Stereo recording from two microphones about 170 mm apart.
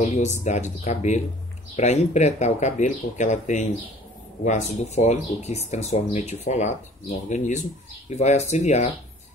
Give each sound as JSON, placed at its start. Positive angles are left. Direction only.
{"t": 0.1, "sound": "speech", "side_deg": 45}